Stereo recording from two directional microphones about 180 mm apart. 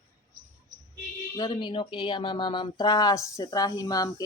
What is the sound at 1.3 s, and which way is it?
Speech, 20° left (ahead or behind).